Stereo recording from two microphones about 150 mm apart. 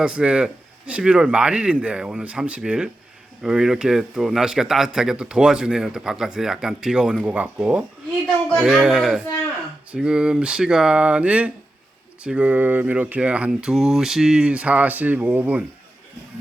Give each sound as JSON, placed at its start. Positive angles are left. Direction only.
{"t": 0.0, "sound": "speech", "side_deg": -5}
{"t": 8.4, "sound": "speech", "side_deg": 5}